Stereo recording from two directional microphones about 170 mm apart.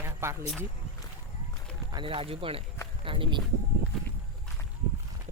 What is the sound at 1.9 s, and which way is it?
Speech, 30° right (ahead or behind).